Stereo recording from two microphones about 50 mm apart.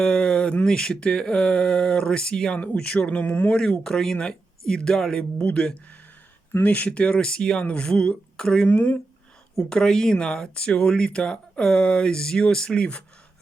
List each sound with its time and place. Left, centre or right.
0.0 s a sound: centre
0.6 s speech: centre
3.1 s speech: left
3.5 s speech: centre
8.6 s speech: left
9.6 s speech: centre